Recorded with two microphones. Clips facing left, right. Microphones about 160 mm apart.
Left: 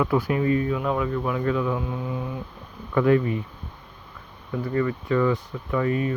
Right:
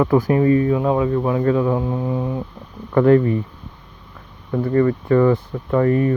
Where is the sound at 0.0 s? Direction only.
40° right (ahead or behind).